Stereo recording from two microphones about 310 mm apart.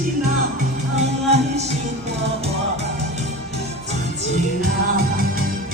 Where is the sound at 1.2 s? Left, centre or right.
Right.